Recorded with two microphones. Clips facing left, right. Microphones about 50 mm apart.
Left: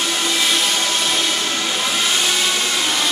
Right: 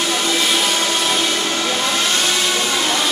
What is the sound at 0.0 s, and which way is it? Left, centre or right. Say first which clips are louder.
Train: right 1 dB; centre.